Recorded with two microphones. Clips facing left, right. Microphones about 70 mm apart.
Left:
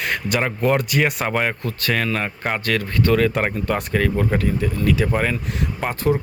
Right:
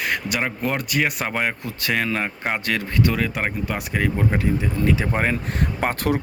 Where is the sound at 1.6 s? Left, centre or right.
Centre.